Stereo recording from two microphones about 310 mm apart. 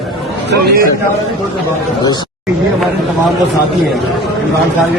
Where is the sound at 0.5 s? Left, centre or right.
Right.